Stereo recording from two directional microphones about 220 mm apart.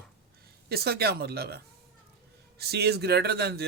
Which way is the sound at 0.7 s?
45° right (ahead or behind).